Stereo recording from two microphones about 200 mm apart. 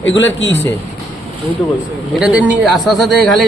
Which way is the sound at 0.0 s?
70° left (ahead or behind).